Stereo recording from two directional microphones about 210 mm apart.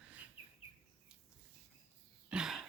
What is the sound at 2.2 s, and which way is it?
Throat clearing, 5° right (ahead or behind).